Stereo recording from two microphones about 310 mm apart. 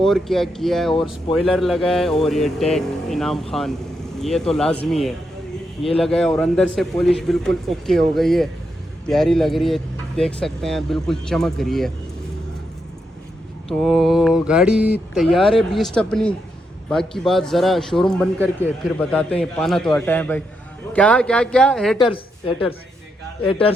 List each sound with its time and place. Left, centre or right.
0.0 s speech: centre
13.7 s speech: centre
21.9 s speech: centre